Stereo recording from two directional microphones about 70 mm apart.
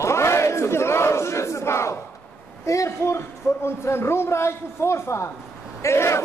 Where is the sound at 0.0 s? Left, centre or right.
Left.